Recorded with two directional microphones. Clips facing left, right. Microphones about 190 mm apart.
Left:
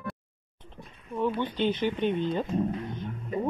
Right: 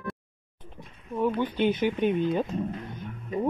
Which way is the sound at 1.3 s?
10° right (ahead or behind).